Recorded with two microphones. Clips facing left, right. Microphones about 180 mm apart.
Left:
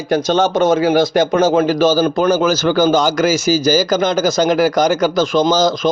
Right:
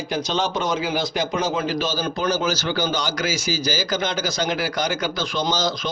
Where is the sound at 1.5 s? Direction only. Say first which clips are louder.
Left 11 dB; 45° left (ahead or behind).